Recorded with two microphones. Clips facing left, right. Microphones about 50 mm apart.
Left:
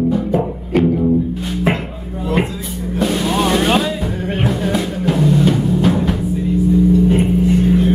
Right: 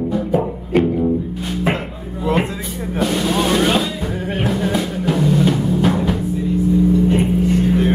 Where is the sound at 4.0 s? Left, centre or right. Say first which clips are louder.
Left 2 dB; centre.